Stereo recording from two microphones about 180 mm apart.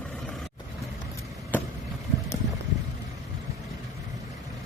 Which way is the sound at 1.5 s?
10° left (ahead or behind).